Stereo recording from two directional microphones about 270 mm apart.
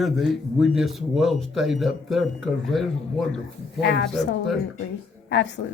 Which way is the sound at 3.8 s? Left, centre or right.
Left.